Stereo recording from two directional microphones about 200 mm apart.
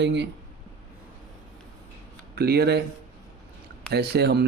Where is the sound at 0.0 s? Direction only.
60° right (ahead or behind).